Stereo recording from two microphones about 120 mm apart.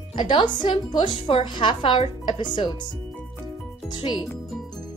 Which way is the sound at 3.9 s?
40° left (ahead or behind).